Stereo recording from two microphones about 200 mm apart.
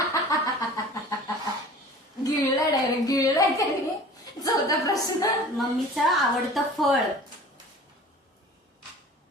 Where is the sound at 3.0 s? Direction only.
15° left (ahead or behind).